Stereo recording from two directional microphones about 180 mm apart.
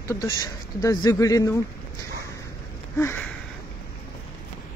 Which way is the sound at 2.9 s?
10° left (ahead or behind).